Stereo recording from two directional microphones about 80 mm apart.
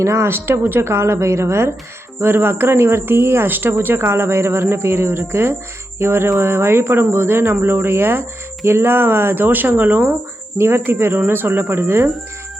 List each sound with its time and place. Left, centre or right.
0.0 s speech: right